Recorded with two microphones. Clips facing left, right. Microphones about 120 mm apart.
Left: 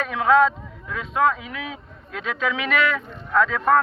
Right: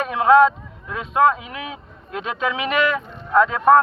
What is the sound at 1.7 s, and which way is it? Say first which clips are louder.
A man's voice: right 4 dB; 15° right (ahead or behind).